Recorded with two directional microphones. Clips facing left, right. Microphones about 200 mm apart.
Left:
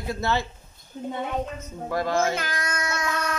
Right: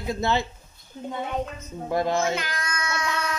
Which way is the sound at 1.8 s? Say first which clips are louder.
Right 1 dB; 20° right (ahead or behind).